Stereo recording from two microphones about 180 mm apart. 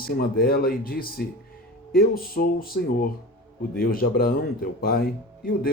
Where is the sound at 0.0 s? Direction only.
55° left (ahead or behind).